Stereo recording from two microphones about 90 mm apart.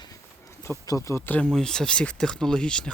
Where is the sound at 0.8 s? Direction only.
40° left (ahead or behind).